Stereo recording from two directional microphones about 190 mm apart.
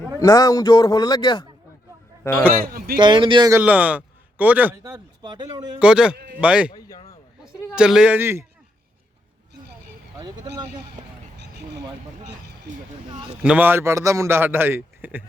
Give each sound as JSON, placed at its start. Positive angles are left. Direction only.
{"t": 0.2, "sound": "a man's voice", "side_deg": 20}
{"t": 2.6, "sound": "speech", "side_deg": -50}
{"t": 3.0, "sound": "speech", "side_deg": -25}
{"t": 3.6, "sound": "a man's voice", "side_deg": -10}
{"t": 4.8, "sound": "speech", "side_deg": -20}
{"t": 5.8, "sound": "a man's voice", "side_deg": -5}
{"t": 6.7, "sound": "a sound", "side_deg": 20}
{"t": 7.8, "sound": "a man's voice", "side_deg": -5}
{"t": 10.2, "sound": "a man's voice", "side_deg": -20}
{"t": 13.3, "sound": "a man's voice", "side_deg": -5}